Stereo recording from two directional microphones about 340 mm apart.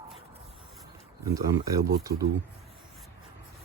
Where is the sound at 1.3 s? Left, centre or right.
Centre.